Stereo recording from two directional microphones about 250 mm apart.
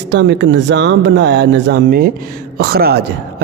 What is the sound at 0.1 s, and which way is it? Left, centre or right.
Speech, right.